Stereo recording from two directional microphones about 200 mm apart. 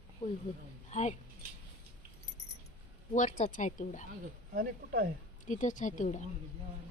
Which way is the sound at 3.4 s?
40° left (ahead or behind).